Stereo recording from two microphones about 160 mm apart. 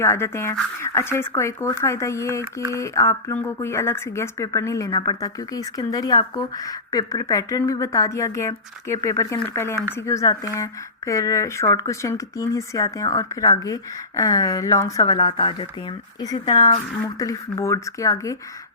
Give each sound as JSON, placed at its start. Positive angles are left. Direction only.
{"t": 0.0, "sound": "speech", "side_deg": 15}
{"t": 2.4, "sound": "speech", "side_deg": -25}
{"t": 2.7, "sound": "a woman's voice", "side_deg": 20}